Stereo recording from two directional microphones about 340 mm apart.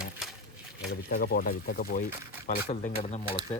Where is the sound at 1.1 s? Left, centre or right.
Left.